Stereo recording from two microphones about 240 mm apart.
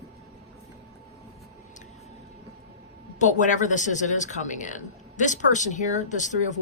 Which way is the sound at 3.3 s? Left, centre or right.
Left.